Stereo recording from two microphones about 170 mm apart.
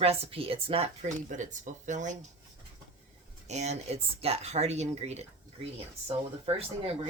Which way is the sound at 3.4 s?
40° right (ahead or behind).